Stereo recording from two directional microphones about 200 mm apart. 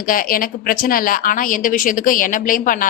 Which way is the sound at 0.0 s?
45° left (ahead or behind).